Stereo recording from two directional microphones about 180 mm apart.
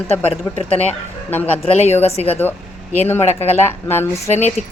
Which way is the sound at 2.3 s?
10° left (ahead or behind).